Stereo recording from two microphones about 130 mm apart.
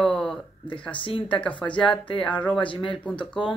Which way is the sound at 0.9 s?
40° left (ahead or behind).